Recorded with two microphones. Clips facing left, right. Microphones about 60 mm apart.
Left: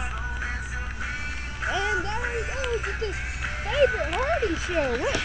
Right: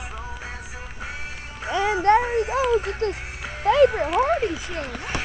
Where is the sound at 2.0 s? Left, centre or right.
Right.